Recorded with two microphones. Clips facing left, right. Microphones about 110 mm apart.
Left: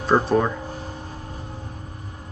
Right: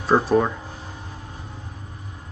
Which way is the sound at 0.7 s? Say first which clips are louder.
Left 4 dB; 40° left (ahead or behind).